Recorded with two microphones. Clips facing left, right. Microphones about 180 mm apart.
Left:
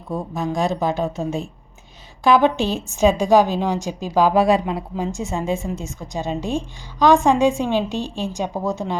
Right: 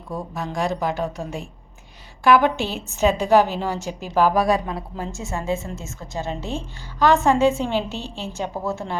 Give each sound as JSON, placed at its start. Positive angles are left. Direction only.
{"t": 0.1, "sound": "a woman's voice", "side_deg": 20}